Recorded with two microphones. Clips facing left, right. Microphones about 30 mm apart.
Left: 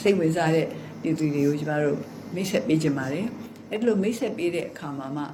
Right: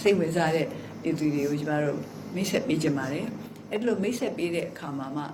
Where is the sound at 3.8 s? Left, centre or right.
Left.